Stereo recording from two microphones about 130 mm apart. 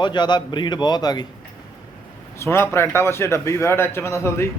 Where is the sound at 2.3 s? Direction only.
20° left (ahead or behind).